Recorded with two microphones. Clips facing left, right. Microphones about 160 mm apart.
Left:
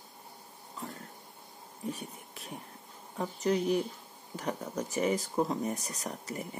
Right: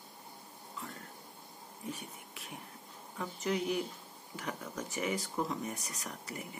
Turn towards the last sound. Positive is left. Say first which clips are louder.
# left 5 dB
turn(degrees=40)  # may be behind; listen again after turning